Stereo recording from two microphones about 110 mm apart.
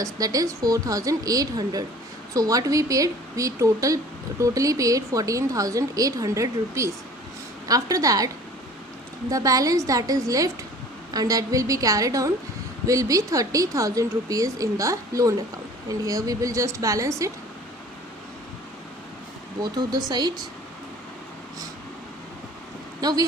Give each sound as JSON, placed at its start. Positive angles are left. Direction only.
{"t": 0.0, "sound": "speech", "side_deg": -30}
{"t": 9.3, "sound": "a woman's voice", "side_deg": -30}
{"t": 19.5, "sound": "speech", "side_deg": -40}
{"t": 23.0, "sound": "speech", "side_deg": -35}